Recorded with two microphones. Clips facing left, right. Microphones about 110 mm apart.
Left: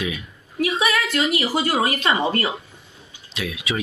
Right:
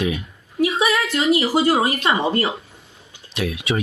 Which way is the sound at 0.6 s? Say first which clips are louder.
Right 2 dB; 25° right (ahead or behind).